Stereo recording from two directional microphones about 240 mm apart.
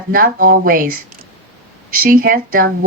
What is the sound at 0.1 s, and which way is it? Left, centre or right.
Speech, right.